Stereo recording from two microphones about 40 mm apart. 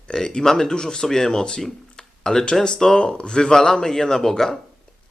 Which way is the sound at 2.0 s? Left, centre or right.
Centre.